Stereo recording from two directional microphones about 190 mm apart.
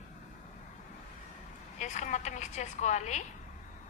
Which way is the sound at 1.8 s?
40° left (ahead or behind).